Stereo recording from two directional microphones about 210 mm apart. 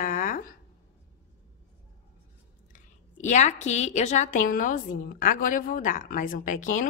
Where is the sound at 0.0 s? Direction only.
40° left (ahead or behind).